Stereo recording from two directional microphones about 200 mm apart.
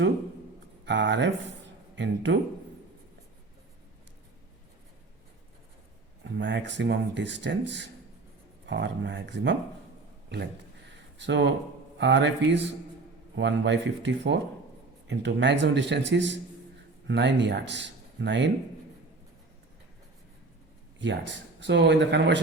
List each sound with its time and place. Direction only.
0.9 s speech: 60° right (ahead or behind)
6.2 s speech: 60° right (ahead or behind)
11.2 s speech: 60° right (ahead or behind)
21.0 s speech: 65° right (ahead or behind)